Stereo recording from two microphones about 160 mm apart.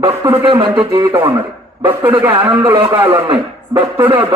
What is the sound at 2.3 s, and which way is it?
Speech, 25° right (ahead or behind).